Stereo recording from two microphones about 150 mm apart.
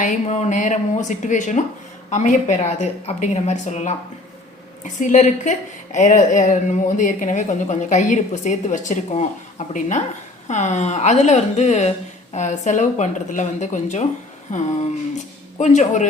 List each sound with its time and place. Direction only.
0.0 s a woman's voice: 50° left (ahead or behind)